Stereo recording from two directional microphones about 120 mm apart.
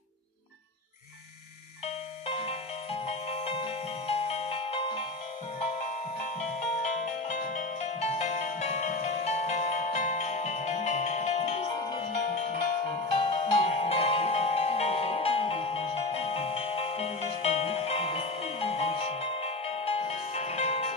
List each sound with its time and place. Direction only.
2.2 s music: 55° left (ahead or behind)
6.8 s music: 85° left; by 11.6 s 65° left (ahead or behind)
11.7 s music: 35° left (ahead or behind)
12.0 s music: 70° left (ahead or behind)
12.8 s music: 55° left (ahead or behind)